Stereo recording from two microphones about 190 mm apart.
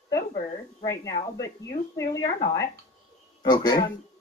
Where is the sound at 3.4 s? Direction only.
20° left (ahead or behind).